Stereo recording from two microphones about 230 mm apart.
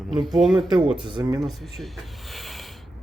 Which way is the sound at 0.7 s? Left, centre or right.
Right.